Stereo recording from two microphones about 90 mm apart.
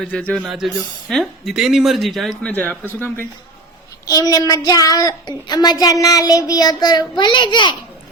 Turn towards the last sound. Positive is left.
turn(degrees=60)  # may be behind; listen again after turning